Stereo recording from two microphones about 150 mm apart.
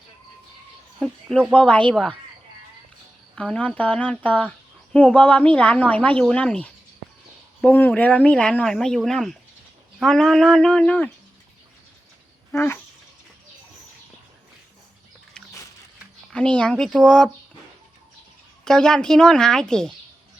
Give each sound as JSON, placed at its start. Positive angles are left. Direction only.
{"t": 0.9, "sound": "speech", "side_deg": -5}
{"t": 1.5, "sound": "speech", "side_deg": 10}
{"t": 3.3, "sound": "a woman's voice", "side_deg": 5}
{"t": 12.5, "sound": "a sound", "side_deg": 15}
{"t": 15.3, "sound": "a sound", "side_deg": 5}
{"t": 16.3, "sound": "a woman's voice", "side_deg": 5}
{"t": 18.6, "sound": "a woman's voice", "side_deg": 5}